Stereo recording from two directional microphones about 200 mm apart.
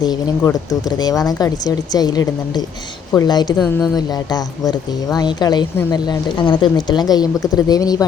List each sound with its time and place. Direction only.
0.0 s speech: 20° left (ahead or behind)